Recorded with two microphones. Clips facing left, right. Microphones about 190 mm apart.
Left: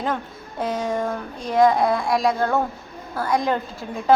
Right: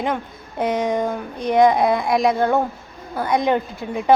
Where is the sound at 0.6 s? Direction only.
20° right (ahead or behind).